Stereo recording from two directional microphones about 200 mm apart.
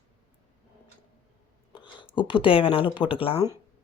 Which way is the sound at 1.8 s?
25° left (ahead or behind).